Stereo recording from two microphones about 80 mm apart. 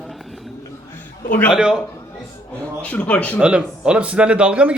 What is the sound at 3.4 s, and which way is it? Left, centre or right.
Speech, centre.